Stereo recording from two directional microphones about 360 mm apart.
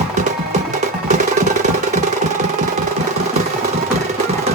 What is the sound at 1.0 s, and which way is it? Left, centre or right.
Music, centre.